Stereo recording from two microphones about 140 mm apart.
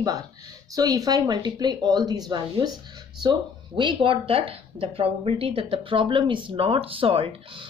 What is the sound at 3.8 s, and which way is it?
Speech, 35° right (ahead or behind).